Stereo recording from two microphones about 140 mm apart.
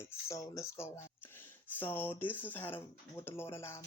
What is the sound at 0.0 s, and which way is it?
Speech, 20° left (ahead or behind).